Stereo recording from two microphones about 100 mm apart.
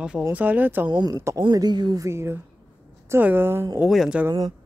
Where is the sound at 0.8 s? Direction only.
45° right (ahead or behind).